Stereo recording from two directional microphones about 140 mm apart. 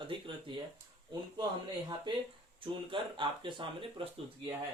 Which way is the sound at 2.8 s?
35° right (ahead or behind).